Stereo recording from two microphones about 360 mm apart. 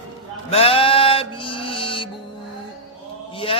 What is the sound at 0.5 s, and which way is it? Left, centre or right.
Music, centre.